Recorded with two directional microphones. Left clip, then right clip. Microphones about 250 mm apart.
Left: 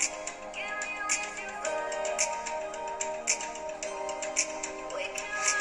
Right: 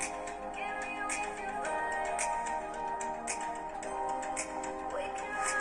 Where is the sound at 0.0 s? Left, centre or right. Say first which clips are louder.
Left 3 dB; left.